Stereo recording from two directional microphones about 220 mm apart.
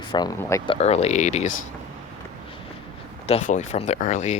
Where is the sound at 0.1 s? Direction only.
15° left (ahead or behind).